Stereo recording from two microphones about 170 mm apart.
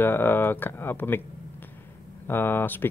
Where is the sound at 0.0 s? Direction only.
10° left (ahead or behind).